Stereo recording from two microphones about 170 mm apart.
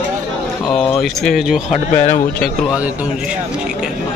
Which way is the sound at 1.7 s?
45° left (ahead or behind).